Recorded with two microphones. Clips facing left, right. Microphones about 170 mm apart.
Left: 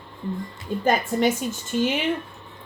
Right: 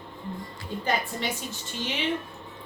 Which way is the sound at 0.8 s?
50° left (ahead or behind).